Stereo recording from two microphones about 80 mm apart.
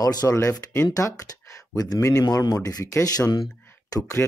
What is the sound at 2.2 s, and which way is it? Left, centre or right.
Speech, left.